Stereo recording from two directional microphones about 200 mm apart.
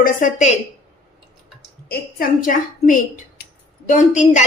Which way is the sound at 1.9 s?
45° left (ahead or behind).